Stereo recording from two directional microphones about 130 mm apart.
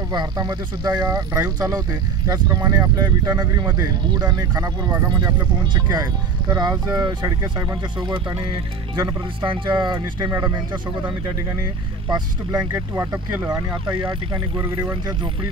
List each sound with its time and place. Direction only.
0.1 s speech: 35° right (ahead or behind)
6.5 s speech: 30° right (ahead or behind)
12.1 s speech: 30° right (ahead or behind)